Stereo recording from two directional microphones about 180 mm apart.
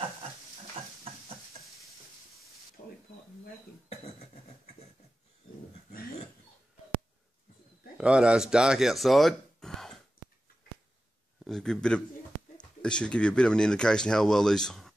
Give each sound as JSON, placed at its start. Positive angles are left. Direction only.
{"t": 0.8, "sound": "goat", "side_deg": -35}
{"t": 8.0, "sound": "speech", "side_deg": -5}
{"t": 11.4, "sound": "speech", "side_deg": 5}